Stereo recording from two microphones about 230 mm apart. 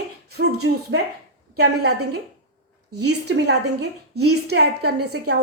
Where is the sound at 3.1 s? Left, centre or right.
Right.